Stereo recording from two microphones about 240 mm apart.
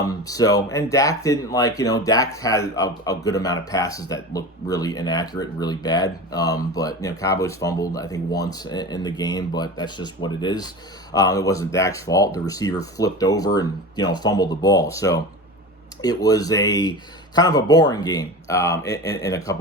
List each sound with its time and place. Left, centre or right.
0.0 s speech: centre